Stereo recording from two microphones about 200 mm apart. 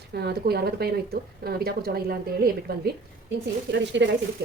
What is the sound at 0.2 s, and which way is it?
Speech, 55° right (ahead or behind).